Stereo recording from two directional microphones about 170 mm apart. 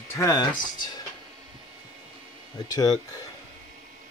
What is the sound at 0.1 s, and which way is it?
Speech, 20° left (ahead or behind).